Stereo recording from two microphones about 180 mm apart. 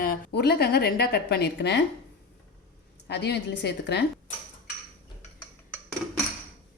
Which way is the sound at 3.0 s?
70° left (ahead or behind).